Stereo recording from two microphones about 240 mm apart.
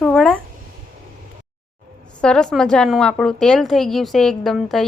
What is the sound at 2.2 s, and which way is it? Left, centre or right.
A woman's voice, centre.